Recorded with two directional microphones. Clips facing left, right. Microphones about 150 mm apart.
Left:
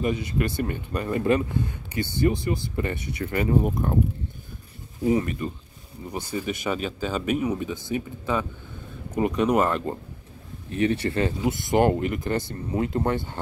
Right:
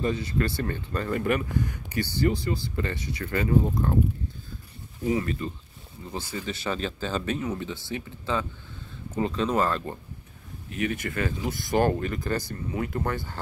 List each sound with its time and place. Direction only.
0.0 s speech: 15° left (ahead or behind)
5.2 s speech: 15° left (ahead or behind)
10.7 s speech: 30° left (ahead or behind)